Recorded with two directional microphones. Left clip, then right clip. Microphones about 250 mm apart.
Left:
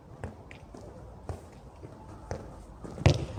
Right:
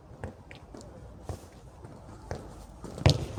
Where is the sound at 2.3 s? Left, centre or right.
Centre.